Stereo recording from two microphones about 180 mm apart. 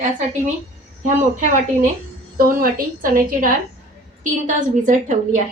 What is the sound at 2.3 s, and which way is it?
A woman's voice, 55° right (ahead or behind).